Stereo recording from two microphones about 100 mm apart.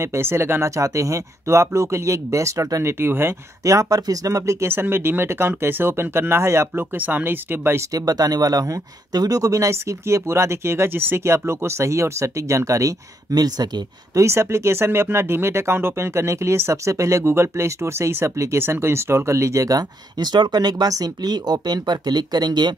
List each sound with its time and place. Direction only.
0.0 s speech: 25° right (ahead or behind)
7.9 s speech: 40° right (ahead or behind)
14.2 s speech: 25° right (ahead or behind); by 22.8 s 45° right (ahead or behind)